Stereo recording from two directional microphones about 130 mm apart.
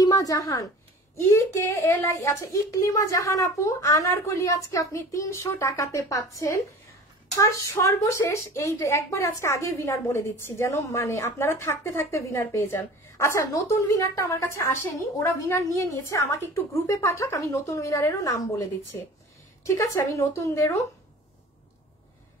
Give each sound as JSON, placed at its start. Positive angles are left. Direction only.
{"t": 0.0, "sound": "a woman's voice", "side_deg": 30}